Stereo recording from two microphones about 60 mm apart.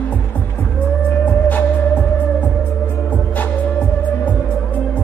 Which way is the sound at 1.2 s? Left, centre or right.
Left.